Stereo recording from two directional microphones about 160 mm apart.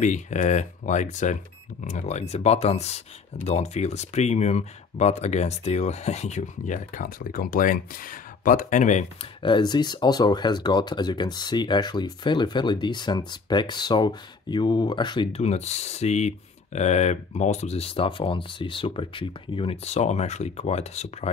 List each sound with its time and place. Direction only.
0.0 s speech: 50° left (ahead or behind)
9.4 s speech: 30° left (ahead or behind)